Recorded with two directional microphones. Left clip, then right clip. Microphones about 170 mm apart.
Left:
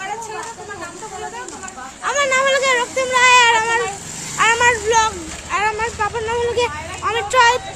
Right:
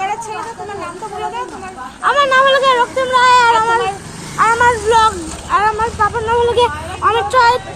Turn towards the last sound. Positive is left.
turn(degrees=20)  # may be behind; listen again after turning